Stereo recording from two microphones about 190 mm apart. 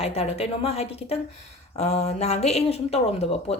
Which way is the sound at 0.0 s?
30° left (ahead or behind).